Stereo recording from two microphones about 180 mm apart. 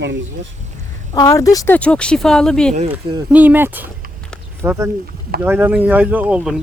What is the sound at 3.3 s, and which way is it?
Speech, 10° right (ahead or behind).